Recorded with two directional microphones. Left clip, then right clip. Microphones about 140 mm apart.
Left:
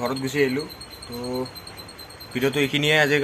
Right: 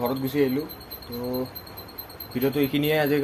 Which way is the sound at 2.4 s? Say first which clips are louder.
Left 2 dB; centre (ahead or behind).